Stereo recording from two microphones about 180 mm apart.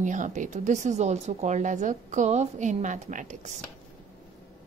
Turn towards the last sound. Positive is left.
turn(degrees=-40)  # may be behind; listen again after turning